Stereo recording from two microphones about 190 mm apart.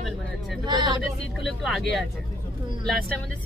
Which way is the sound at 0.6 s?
25° right (ahead or behind).